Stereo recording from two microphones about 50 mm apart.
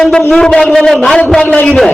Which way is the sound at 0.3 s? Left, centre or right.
Centre.